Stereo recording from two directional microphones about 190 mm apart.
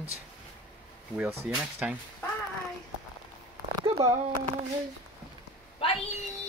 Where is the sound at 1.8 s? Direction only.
5° right (ahead or behind).